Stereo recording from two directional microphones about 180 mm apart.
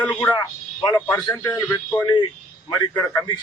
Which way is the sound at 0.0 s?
10° left (ahead or behind).